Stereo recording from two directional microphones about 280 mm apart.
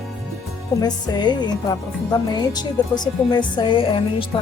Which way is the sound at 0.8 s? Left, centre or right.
Centre.